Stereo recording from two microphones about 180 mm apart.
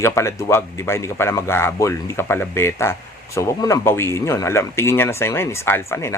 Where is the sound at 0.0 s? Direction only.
15° left (ahead or behind).